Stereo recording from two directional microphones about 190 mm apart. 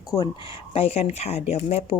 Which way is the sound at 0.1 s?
25° left (ahead or behind).